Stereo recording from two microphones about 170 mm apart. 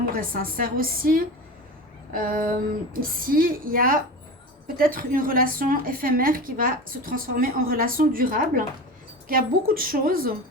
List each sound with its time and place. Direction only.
0.1 s a woman's voice: 55° right (ahead or behind)